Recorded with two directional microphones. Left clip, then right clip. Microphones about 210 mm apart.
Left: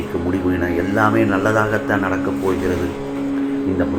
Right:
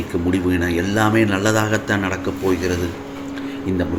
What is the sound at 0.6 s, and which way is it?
Speech, 60° right (ahead or behind).